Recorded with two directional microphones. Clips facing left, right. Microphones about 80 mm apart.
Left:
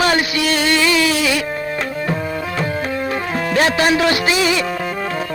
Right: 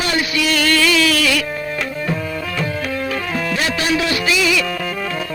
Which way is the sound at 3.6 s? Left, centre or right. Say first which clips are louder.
Left 6 dB; left.